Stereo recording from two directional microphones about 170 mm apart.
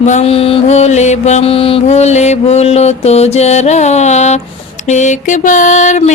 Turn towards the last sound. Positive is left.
turn(degrees=45)  # may be behind; listen again after turning